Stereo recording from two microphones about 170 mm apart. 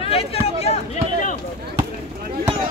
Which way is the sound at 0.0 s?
35° left (ahead or behind).